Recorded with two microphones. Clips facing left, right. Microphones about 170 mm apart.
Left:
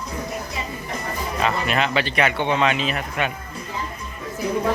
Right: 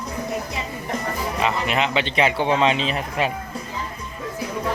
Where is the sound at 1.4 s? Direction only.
15° right (ahead or behind).